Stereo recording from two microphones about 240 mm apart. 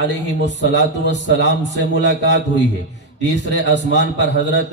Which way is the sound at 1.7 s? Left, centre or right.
Right.